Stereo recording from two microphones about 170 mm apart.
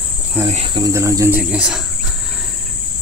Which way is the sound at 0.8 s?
20° right (ahead or behind).